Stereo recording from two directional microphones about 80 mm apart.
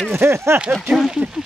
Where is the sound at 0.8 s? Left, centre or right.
Centre.